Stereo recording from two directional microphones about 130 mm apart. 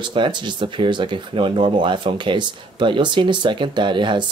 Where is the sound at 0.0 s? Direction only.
40° right (ahead or behind).